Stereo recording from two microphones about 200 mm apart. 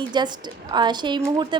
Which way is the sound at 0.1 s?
20° right (ahead or behind).